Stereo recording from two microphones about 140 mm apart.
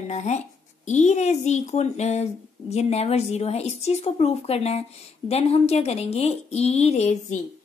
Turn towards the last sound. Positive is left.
turn(degrees=50)  # may be behind; listen again after turning